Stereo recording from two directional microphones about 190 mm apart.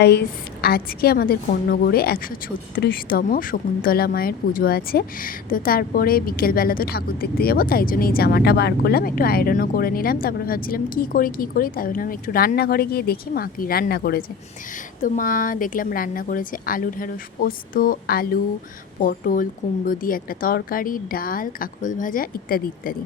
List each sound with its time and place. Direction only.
0.0 s speech: 60° left (ahead or behind)